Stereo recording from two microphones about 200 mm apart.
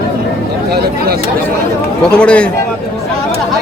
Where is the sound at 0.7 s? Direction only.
50° right (ahead or behind).